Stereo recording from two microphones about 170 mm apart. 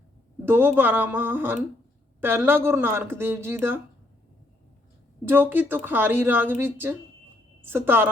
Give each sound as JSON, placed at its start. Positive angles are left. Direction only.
{"t": 0.4, "sound": "a woman's voice", "side_deg": -10}
{"t": 5.2, "sound": "a woman's voice", "side_deg": -10}